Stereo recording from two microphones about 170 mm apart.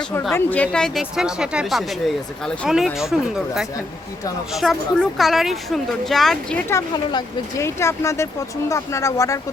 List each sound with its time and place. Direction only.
0.0 s speech: 5° left (ahead or behind)
6.7 s speech: 20° left (ahead or behind)